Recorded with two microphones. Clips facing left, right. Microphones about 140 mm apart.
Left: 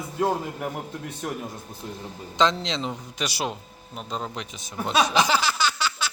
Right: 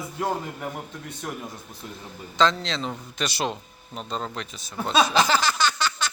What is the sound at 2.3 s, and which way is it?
A man's voice, 20° left (ahead or behind).